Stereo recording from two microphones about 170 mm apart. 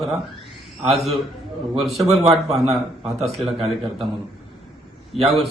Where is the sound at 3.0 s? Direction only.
Centre (ahead or behind).